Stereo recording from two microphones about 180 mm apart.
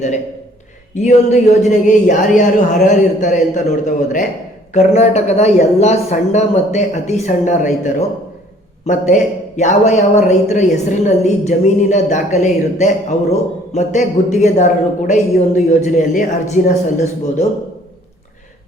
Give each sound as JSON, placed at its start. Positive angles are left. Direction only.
{"t": 0.9, "sound": "speech", "side_deg": 40}